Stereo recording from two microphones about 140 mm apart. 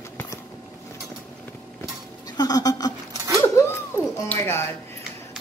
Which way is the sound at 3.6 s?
20° left (ahead or behind).